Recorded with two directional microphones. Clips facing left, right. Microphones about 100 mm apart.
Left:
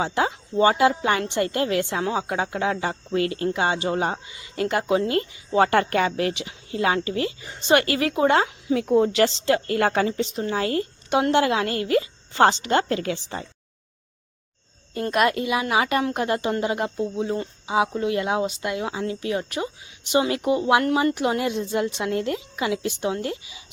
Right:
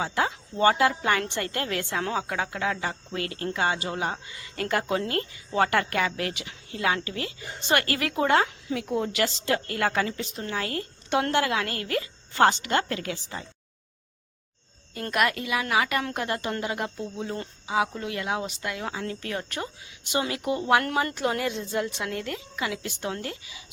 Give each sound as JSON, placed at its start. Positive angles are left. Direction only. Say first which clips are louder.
{"t": 0.0, "sound": "a woman's voice", "louder": "left 3 dB", "side_deg": 20}
{"t": 4.3, "sound": "a woman's voice", "louder": "left 4 dB", "side_deg": 20}
{"t": 15.1, "sound": "a woman's voice", "louder": "left 4 dB", "side_deg": 25}
{"t": 20.2, "sound": "a woman's voice", "louder": "left 6 dB", "side_deg": 30}
{"t": 20.5, "sound": "a woman's voice", "louder": "left 3 dB", "side_deg": 15}